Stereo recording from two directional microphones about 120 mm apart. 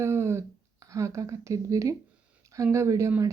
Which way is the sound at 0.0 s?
20° right (ahead or behind).